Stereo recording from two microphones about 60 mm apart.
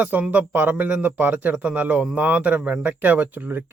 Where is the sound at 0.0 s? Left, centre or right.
Right.